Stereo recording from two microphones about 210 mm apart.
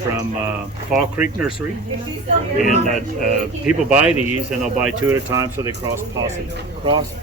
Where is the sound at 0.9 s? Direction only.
Centre (ahead or behind).